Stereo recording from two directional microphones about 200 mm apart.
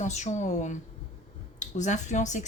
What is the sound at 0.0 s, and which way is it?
Speech, 35° left (ahead or behind).